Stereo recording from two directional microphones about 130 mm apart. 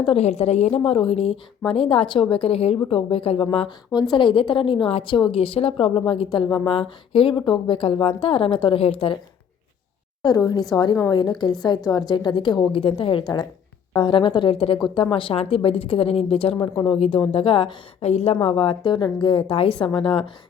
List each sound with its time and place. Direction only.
0.0 s a woman's voice: 50° left (ahead or behind)
10.2 s a woman's voice: 30° left (ahead or behind)
18.0 s a woman's voice: 55° left (ahead or behind)
18.3 s a woman's voice: 40° left (ahead or behind)